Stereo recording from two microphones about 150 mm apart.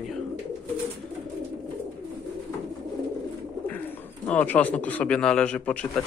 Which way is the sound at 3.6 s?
10° left (ahead or behind).